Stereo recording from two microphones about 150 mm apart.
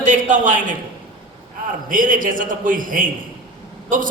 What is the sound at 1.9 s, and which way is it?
A man's voice, 65° right (ahead or behind).